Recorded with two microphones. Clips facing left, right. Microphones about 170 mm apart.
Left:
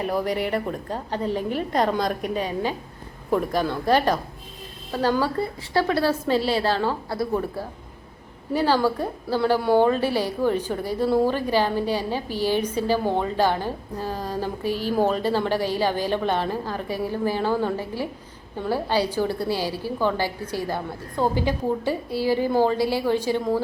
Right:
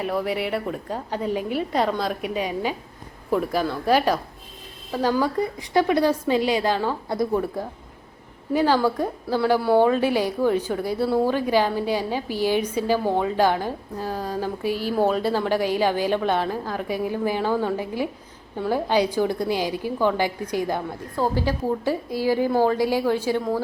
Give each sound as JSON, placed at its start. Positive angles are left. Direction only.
{"t": 0.0, "sound": "a woman's voice", "side_deg": 0}
{"t": 8.7, "sound": "a woman's voice", "side_deg": 10}
{"t": 9.4, "sound": "a woman's voice", "side_deg": -5}
{"t": 10.7, "sound": "a woman's voice", "side_deg": 0}
{"t": 11.0, "sound": "a woman's voice", "side_deg": 10}
{"t": 11.3, "sound": "a woman's voice", "side_deg": -10}
{"t": 17.4, "sound": "a woman's voice", "side_deg": 10}
{"t": 17.7, "sound": "a woman's voice", "side_deg": -15}
{"t": 21.2, "sound": "a woman's voice", "side_deg": 0}
{"t": 22.1, "sound": "a woman's voice", "side_deg": -10}